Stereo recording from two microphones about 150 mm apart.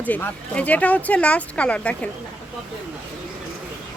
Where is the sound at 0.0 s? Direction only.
10° left (ahead or behind).